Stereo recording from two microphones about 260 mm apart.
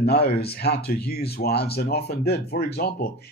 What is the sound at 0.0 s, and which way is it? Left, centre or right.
Speech, left.